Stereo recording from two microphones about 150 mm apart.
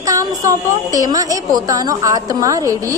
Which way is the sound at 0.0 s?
20° right (ahead or behind).